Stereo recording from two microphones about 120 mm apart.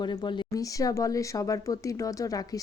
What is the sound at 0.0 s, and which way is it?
A woman's voice, 40° left (ahead or behind).